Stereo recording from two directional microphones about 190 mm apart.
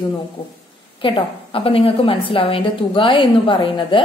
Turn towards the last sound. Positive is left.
turn(degrees=25)  # may be behind; listen again after turning